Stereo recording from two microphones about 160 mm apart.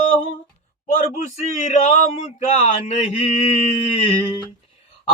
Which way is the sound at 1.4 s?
45° left (ahead or behind).